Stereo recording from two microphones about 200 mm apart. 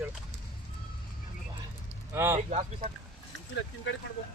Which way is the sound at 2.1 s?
10° right (ahead or behind).